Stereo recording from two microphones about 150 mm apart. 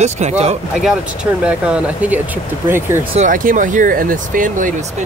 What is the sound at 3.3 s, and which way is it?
Speech, 65° right (ahead or behind).